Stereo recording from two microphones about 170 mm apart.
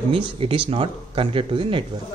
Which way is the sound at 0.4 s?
30° right (ahead or behind).